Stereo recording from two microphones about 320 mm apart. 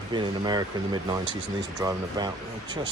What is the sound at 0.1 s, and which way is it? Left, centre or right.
Speech, centre.